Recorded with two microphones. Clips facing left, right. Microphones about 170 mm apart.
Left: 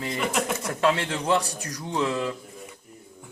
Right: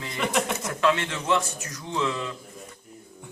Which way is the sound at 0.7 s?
35° left (ahead or behind).